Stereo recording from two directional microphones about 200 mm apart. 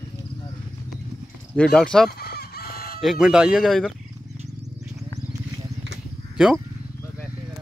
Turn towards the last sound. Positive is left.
turn(degrees=-5)  # may be behind; listen again after turning